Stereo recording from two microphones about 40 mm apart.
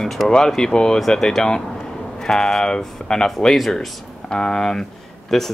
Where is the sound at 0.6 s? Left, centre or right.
Centre.